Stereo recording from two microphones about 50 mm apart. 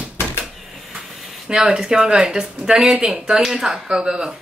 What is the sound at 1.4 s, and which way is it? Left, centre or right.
Speech, centre.